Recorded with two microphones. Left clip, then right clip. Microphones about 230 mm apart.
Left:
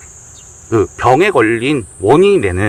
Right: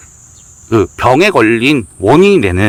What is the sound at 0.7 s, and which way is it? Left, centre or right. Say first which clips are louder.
Speech: right 1 dB; right.